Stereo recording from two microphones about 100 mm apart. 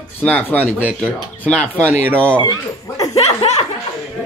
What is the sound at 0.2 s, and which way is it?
Speech, 15° left (ahead or behind).